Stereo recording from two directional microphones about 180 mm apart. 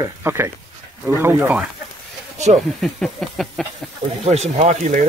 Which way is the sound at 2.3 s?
40° right (ahead or behind).